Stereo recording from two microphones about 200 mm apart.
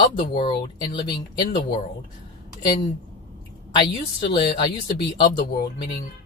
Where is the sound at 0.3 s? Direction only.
25° left (ahead or behind).